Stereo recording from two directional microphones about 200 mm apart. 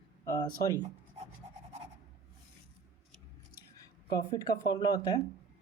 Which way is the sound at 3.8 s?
20° left (ahead or behind).